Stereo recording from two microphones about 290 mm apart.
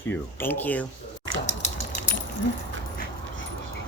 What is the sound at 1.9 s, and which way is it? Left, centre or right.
Keys jangling, left.